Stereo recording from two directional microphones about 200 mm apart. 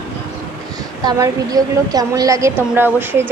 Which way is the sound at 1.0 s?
20° right (ahead or behind).